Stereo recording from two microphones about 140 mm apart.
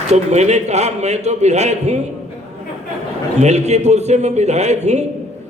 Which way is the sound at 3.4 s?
55° right (ahead or behind).